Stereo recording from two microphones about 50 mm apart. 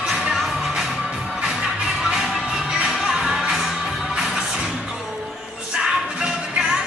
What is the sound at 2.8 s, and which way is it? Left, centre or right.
Music, centre.